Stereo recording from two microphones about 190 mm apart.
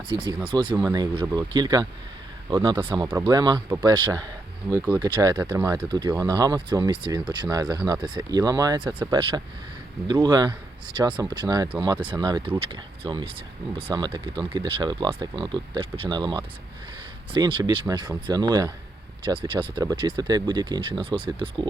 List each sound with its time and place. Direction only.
0.1 s speech: 25° right (ahead or behind)
10.1 s speech: 20° right (ahead or behind)